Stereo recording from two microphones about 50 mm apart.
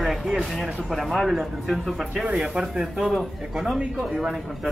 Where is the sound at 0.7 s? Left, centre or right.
Centre.